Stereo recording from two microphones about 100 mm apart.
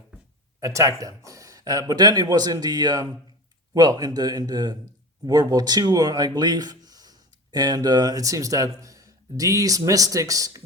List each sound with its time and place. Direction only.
0.6 s a man's voice: 30° right (ahead or behind)